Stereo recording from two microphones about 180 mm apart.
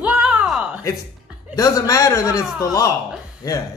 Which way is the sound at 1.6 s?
20° left (ahead or behind).